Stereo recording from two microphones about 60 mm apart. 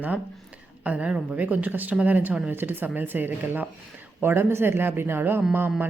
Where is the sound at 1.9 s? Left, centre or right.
Centre.